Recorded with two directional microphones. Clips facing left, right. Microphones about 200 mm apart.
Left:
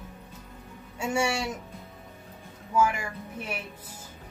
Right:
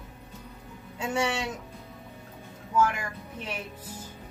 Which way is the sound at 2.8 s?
10° left (ahead or behind).